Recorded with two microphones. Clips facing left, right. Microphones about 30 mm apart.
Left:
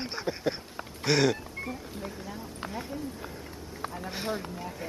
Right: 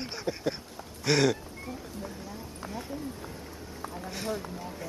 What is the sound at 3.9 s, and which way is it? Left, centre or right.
Speech, left.